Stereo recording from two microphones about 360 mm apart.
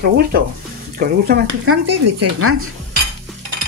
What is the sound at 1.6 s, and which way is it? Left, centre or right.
Speech, right.